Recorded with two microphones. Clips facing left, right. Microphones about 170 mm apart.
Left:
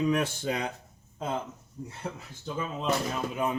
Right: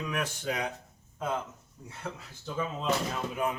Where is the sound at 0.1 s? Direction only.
30° left (ahead or behind).